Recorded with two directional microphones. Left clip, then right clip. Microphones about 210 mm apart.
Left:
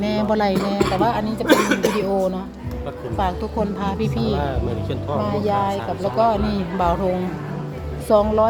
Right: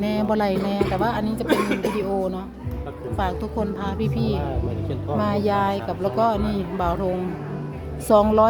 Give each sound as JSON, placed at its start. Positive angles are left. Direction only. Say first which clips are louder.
{"t": 0.0, "sound": "a woman's voice", "louder": "left 3 dB", "side_deg": 0}
{"t": 1.5, "sound": "cough", "louder": "left 6 dB", "side_deg": 45}
{"t": 2.0, "sound": "a woman's voice", "louder": "left 4 dB", "side_deg": 5}
{"t": 5.2, "sound": "speech", "louder": "even", "side_deg": -15}
{"t": 6.2, "sound": "a woman's voice", "louder": "left 3 dB", "side_deg": 0}
{"t": 8.0, "sound": "speech", "louder": "even", "side_deg": -15}